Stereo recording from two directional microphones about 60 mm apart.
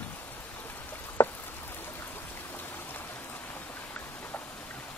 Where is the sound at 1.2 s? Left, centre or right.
Left.